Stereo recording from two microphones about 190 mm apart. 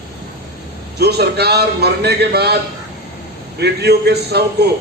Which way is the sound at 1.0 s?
60° right (ahead or behind).